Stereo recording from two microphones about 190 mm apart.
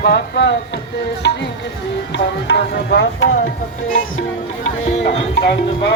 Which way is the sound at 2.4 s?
65° left (ahead or behind).